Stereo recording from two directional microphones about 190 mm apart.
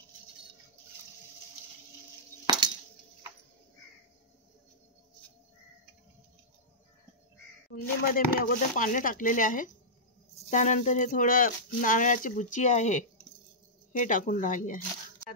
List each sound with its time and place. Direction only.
2.4 s chink: 25° right (ahead or behind)
7.7 s speech: 50° left (ahead or behind)